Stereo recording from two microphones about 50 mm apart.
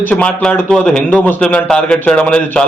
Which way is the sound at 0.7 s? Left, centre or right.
Centre.